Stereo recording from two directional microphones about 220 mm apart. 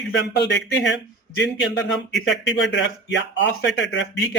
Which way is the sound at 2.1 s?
Centre (ahead or behind).